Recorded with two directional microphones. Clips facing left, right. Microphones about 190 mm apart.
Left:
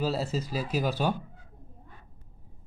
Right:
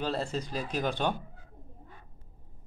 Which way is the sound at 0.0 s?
5° left (ahead or behind).